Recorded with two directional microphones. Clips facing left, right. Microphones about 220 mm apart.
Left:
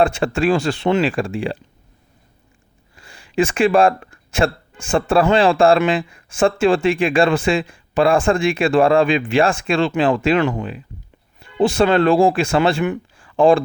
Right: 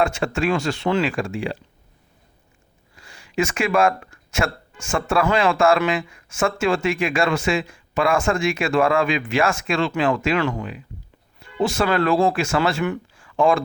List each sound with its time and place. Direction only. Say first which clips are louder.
0.0 s speech: left 4 dB; 30° left (ahead or behind)
2.9 s speech: left 3 dB; 30° left (ahead or behind)
11.5 s speech: left 5 dB; 30° left (ahead or behind)
13.1 s a sound: left 6 dB; 30° left (ahead or behind)